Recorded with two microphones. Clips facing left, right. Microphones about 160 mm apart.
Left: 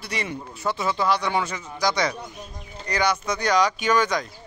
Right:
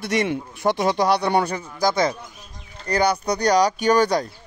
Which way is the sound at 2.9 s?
35° right (ahead or behind).